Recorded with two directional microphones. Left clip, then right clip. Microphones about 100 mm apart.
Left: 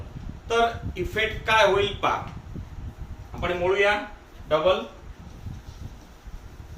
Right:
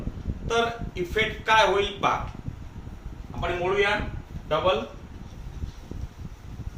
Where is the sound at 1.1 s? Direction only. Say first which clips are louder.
Right 1 dB; 25° right (ahead or behind).